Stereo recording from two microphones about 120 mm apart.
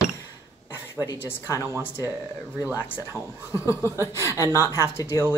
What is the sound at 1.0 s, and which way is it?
Speech, 20° left (ahead or behind).